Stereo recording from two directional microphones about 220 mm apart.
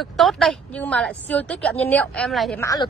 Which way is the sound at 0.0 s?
Centre (ahead or behind).